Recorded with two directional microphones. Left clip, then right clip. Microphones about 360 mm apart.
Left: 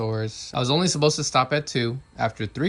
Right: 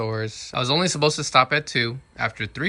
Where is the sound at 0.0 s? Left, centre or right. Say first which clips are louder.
Right 1 dB; centre.